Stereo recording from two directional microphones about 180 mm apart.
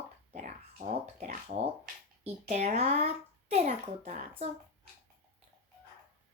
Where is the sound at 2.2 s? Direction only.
40° right (ahead or behind).